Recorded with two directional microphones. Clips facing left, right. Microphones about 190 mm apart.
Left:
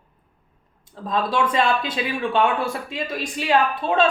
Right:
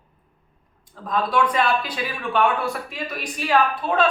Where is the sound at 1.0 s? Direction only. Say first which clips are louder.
Even; 25° left (ahead or behind).